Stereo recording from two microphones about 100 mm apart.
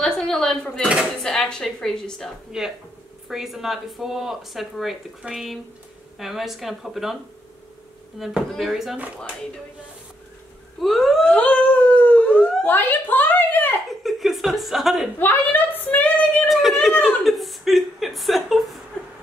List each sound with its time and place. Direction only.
0.0 s speech: 5° left (ahead or behind)
8.2 s speech: 5° right (ahead or behind)
8.9 s speech: 15° right (ahead or behind)
10.8 s speech: centre (ahead or behind)
11.2 s dog: 15° left (ahead or behind)
13.8 s speech: centre (ahead or behind)
15.1 s speech: 20° left (ahead or behind)
16.4 s speech: centre (ahead or behind)